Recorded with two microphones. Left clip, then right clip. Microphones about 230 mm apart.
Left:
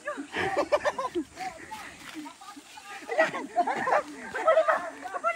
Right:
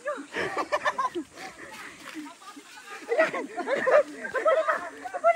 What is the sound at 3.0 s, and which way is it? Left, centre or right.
Chatter, centre.